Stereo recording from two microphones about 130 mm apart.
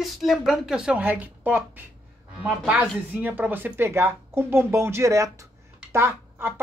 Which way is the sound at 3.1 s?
10° right (ahead or behind).